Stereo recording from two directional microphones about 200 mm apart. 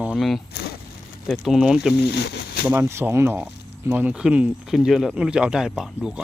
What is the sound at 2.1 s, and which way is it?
Speech, 55° left (ahead or behind).